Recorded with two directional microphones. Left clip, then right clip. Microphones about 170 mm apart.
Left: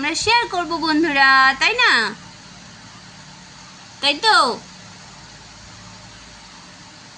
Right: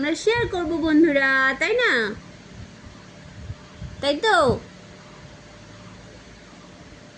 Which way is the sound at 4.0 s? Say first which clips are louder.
Left 4 dB; 15° left (ahead or behind).